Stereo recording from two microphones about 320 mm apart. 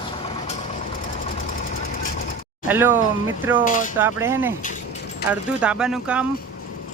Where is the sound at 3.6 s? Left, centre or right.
Left.